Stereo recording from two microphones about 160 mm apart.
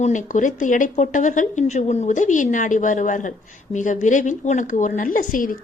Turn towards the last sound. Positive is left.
turn(degrees=60)  # may be behind; listen again after turning